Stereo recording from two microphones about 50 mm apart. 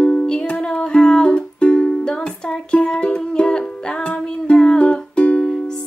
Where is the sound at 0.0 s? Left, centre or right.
Left.